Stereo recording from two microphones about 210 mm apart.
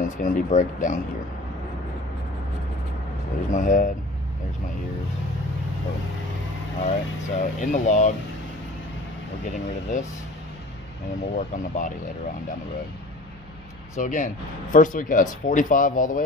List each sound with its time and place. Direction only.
0.0 s speech: 40° left (ahead or behind)
3.4 s speech: 35° left (ahead or behind)
6.8 s speech: 35° left (ahead or behind)
11.3 s speech: 35° left (ahead or behind)
13.9 s speech: 40° left (ahead or behind)